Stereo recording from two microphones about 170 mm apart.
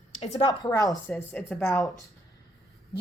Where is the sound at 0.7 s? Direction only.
20° left (ahead or behind); by 1.8 s 5° left (ahead or behind).